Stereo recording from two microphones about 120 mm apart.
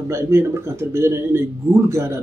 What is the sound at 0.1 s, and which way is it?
Speech, 20° right (ahead or behind).